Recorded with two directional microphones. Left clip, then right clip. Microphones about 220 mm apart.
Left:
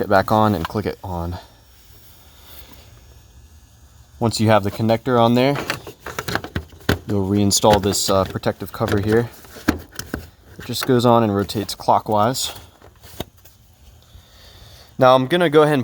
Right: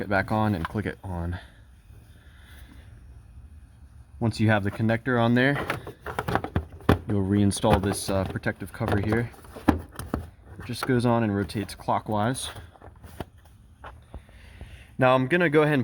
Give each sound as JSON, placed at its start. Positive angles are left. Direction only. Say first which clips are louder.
{"t": 0.3, "sound": "speech", "louder": "left 10 dB", "side_deg": 25}
{"t": 4.2, "sound": "power windows", "louder": "left 9 dB", "side_deg": 30}
{"t": 7.4, "sound": "speech", "louder": "left 9 dB", "side_deg": 0}
{"t": 8.1, "sound": "speech", "louder": "left 9 dB", "side_deg": 30}
{"t": 8.8, "sound": "a sound", "louder": "left 8 dB", "side_deg": 20}
{"t": 10.7, "sound": "speech", "louder": "left 9 dB", "side_deg": 30}
{"t": 14.9, "sound": "speech", "louder": "left 7 dB", "side_deg": 20}